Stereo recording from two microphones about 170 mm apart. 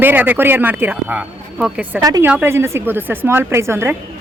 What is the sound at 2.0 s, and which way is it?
Speech, 20° right (ahead or behind).